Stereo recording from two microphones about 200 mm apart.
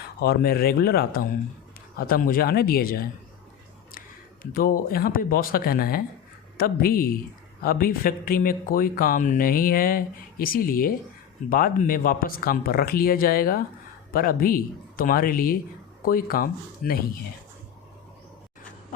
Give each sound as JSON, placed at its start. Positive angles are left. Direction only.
{"t": 0.2, "sound": "speech", "side_deg": 50}
{"t": 4.5, "sound": "speech", "side_deg": 45}